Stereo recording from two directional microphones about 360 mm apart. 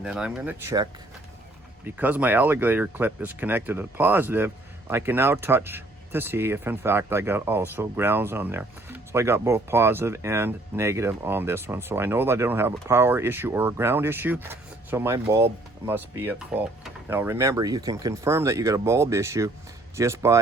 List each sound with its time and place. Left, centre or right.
0.0 s speech: centre